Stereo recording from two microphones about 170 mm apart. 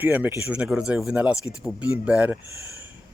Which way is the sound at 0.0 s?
10° right (ahead or behind).